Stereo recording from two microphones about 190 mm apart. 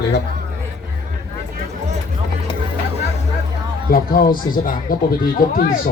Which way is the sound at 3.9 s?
50° left (ahead or behind).